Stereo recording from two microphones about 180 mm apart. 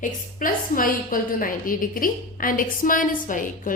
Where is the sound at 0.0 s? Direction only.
50° left (ahead or behind).